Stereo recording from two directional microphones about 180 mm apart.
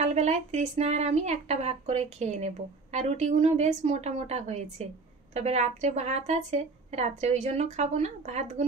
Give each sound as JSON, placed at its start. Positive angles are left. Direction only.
{"t": 0.0, "sound": "speech", "side_deg": -40}